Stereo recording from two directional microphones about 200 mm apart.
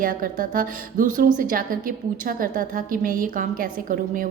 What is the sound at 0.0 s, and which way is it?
A woman's voice, 45° right (ahead or behind).